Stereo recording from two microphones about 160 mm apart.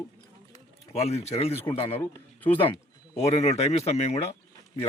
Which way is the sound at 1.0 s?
45° left (ahead or behind).